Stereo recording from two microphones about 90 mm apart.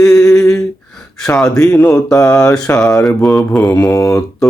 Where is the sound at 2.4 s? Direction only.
35° left (ahead or behind).